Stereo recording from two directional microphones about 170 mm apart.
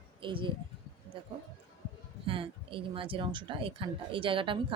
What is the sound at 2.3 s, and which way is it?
Speech, 30° right (ahead or behind).